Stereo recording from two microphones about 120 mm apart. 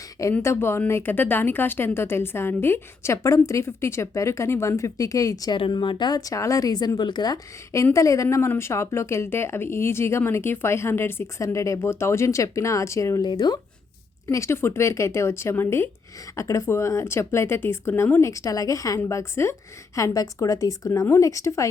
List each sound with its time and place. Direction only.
0.4 s speech: 20° left (ahead or behind)
5.5 s speech: 45° left (ahead or behind); by 13.2 s 25° left (ahead or behind)
13.2 s speech: 40° left (ahead or behind)
14.3 s speech: 25° left (ahead or behind)